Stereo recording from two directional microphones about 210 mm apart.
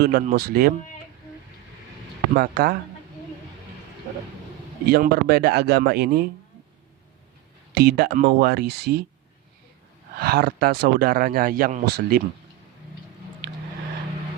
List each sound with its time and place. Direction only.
0.0 s speech: 45° right (ahead or behind)
2.3 s speech: 45° right (ahead or behind)
4.9 s speech: 50° right (ahead or behind)
7.7 s speech: 50° right (ahead or behind)
10.2 s speech: 45° right (ahead or behind)